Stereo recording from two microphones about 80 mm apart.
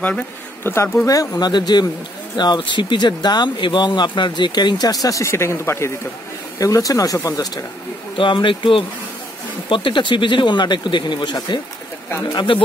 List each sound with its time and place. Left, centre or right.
0.7 s speech: left
1.0 s speech: left
6.6 s speech: left
8.2 s speech: left
12.4 s speech: left